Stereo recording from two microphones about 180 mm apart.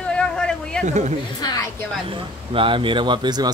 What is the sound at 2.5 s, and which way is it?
Speech, 30° right (ahead or behind).